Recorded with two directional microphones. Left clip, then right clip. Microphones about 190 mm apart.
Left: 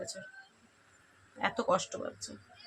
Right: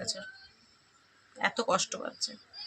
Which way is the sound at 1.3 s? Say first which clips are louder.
Right 2 dB; 5° right (ahead or behind).